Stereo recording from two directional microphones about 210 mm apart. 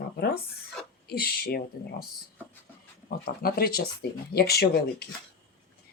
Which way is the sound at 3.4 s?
45° left (ahead or behind).